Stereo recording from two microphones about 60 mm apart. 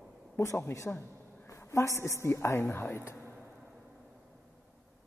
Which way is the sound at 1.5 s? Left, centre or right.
Left.